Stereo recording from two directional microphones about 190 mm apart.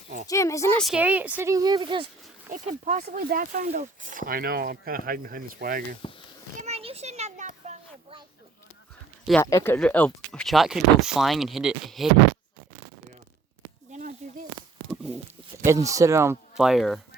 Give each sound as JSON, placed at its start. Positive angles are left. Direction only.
{"t": 0.3, "sound": "speech", "side_deg": 15}
{"t": 0.8, "sound": "speech", "side_deg": -5}
{"t": 2.5, "sound": "speech", "side_deg": -40}
{"t": 6.0, "sound": "a child's voice", "side_deg": 25}
{"t": 6.6, "sound": "a sound", "side_deg": -35}
{"t": 9.4, "sound": "speech", "side_deg": 15}
{"t": 13.9, "sound": "a sound", "side_deg": -40}
{"t": 15.6, "sound": "speech", "side_deg": -15}
{"t": 16.6, "sound": "speech", "side_deg": 0}